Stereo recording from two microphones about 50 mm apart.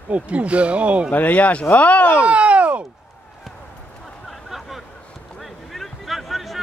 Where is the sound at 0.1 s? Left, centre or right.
Right.